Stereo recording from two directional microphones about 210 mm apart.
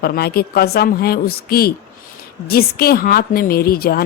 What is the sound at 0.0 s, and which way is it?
A woman's voice, 50° left (ahead or behind).